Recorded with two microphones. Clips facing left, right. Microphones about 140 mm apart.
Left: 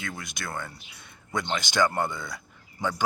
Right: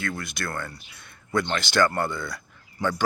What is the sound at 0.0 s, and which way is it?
Speech, 15° left (ahead or behind).